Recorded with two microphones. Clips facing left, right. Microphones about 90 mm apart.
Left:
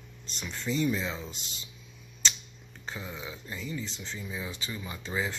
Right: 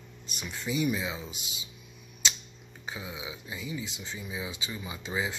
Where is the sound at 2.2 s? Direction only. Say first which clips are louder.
Even; 10° right (ahead or behind).